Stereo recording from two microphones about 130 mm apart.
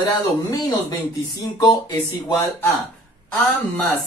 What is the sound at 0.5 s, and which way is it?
Speech, 25° left (ahead or behind).